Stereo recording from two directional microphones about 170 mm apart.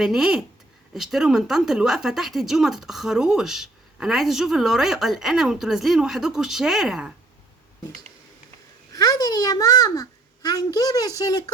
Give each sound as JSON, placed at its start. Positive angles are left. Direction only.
{"t": 0.0, "sound": "a woman's voice", "side_deg": -5}
{"t": 8.9, "sound": "a child's voice", "side_deg": 20}